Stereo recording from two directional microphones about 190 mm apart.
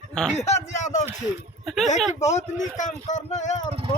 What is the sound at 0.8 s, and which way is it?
Speech, 40° left (ahead or behind).